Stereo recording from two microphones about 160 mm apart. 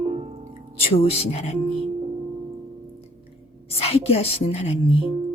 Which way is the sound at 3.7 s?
40° left (ahead or behind).